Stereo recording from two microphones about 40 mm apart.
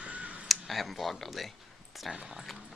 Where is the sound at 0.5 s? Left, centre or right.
Centre.